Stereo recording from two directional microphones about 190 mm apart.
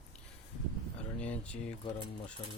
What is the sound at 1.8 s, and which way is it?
Speech, 30° left (ahead or behind).